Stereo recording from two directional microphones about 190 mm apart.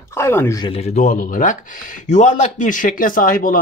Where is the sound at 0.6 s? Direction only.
30° left (ahead or behind).